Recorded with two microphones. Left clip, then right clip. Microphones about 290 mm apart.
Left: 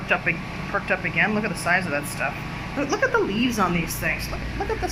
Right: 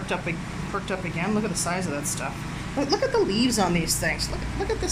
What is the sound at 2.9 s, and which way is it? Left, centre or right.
Speech, centre.